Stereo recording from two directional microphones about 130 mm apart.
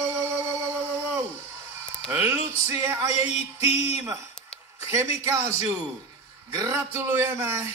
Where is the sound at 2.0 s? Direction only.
15° right (ahead or behind).